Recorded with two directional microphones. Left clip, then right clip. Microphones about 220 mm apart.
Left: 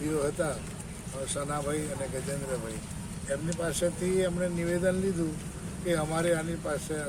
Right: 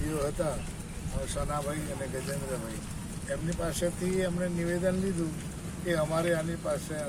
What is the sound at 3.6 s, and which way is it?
Speech, 10° left (ahead or behind).